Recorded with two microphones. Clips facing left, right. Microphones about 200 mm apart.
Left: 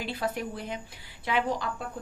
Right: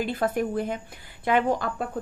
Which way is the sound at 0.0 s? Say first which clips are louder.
Right 6 dB; 50° right (ahead or behind).